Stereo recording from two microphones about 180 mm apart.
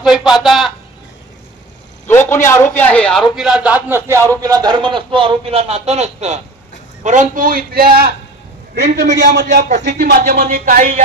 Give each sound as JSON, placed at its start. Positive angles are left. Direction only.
{"t": 0.0, "sound": "a man's voice", "side_deg": -5}
{"t": 2.0, "sound": "a man's voice", "side_deg": 15}
{"t": 8.7, "sound": "a man's voice", "side_deg": -75}
{"t": 10.5, "sound": "a man's voice", "side_deg": -50}